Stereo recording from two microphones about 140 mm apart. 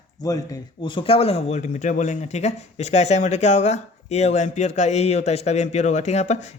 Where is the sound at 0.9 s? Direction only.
45° left (ahead or behind).